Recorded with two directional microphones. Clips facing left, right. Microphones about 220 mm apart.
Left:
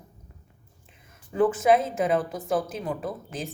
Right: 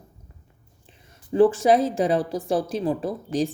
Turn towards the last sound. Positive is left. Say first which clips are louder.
# right 8 dB
turn(degrees=-35)  # may be behind; listen again after turning